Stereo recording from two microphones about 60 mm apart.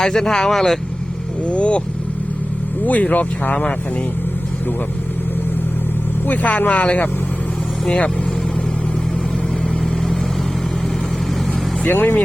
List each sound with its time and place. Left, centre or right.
0.0 s speech: centre
1.5 s speech: centre
2.8 s speech: left
6.2 s speech: left
11.9 s speech: left